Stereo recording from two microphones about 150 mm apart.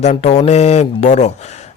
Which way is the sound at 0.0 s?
45° left (ahead or behind).